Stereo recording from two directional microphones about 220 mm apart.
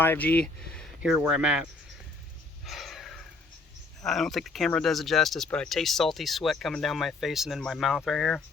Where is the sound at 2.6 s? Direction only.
Centre (ahead or behind).